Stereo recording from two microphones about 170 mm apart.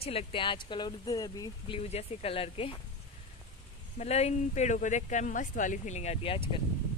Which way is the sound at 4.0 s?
40° left (ahead or behind).